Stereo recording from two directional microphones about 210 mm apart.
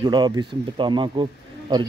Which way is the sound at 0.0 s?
20° right (ahead or behind).